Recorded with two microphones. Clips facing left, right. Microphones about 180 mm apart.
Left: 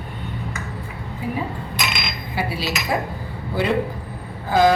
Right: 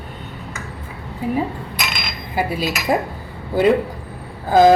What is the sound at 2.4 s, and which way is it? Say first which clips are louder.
Speech: right 4 dB; 45° right (ahead or behind).